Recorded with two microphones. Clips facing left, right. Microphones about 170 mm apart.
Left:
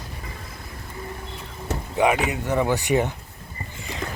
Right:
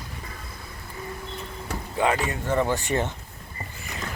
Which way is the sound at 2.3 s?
15° left (ahead or behind).